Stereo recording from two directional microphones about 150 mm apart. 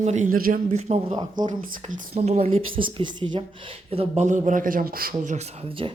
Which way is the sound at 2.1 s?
45° right (ahead or behind).